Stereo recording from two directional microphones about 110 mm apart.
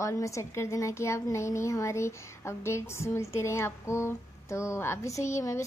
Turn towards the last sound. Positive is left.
turn(degrees=25)  # may be behind; listen again after turning